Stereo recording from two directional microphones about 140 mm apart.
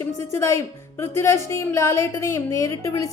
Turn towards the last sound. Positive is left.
turn(degrees=25)  # may be behind; listen again after turning